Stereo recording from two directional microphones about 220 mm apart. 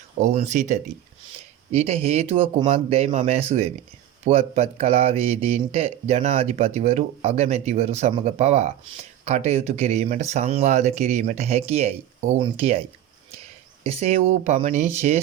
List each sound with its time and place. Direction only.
0.2 s speech: 30° right (ahead or behind)
13.8 s speech: 30° right (ahead or behind)